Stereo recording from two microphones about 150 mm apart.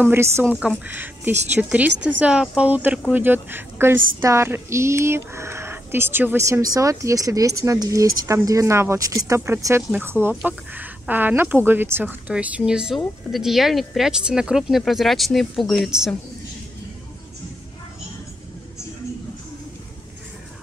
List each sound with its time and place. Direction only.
0.0 s speech: 15° right (ahead or behind)